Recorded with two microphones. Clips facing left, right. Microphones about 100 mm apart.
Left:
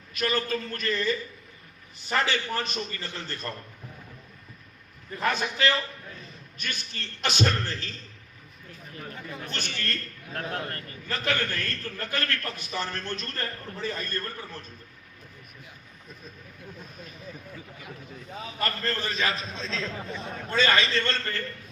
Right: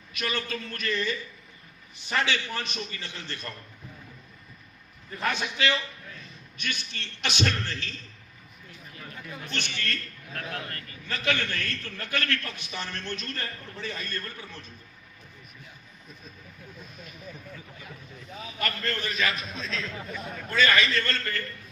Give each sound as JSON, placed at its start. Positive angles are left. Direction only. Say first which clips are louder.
{"t": 0.1, "sound": "a man's voice", "louder": "left 4 dB", "side_deg": 40}
{"t": 5.2, "sound": "a man's voice", "louder": "left 2 dB", "side_deg": 40}
{"t": 9.4, "sound": "a man's voice", "louder": "right 1 dB", "side_deg": 40}
{"t": 18.3, "sound": "a man's voice", "louder": "left 2 dB", "side_deg": 35}